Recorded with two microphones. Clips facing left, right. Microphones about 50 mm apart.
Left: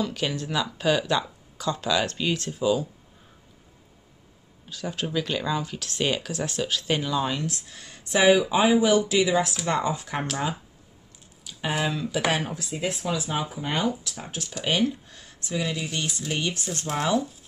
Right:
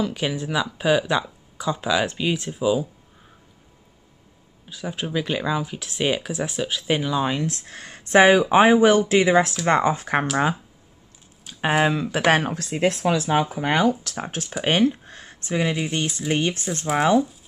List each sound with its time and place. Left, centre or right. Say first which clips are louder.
0.0 s speech: right 3 dB; centre
4.6 s speech: right 1 dB; centre
7.2 s speech: right 4 dB; right
7.5 s speech: right 4 dB; right
11.4 s speech: right 7 dB; right
12.3 s speech: right 12 dB; right
14.6 s speech: right 5 dB; right